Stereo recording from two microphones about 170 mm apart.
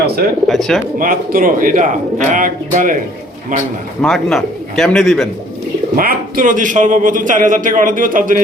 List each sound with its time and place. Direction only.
0.4 s speech: centre (ahead or behind)
0.9 s a man's voice: 55° right (ahead or behind)
4.0 s speech: centre (ahead or behind)
6.0 s a man's voice: 55° right (ahead or behind)